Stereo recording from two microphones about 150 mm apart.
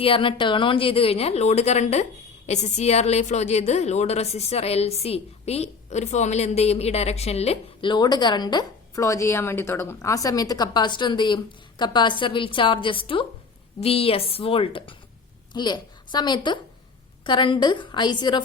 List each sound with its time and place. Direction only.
0.0 s a woman's voice: 35° left (ahead or behind)